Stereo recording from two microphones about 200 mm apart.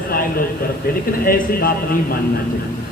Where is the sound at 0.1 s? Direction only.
45° left (ahead or behind).